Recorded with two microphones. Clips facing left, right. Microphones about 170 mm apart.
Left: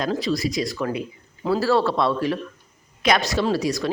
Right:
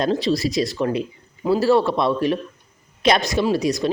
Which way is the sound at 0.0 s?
30° right (ahead or behind).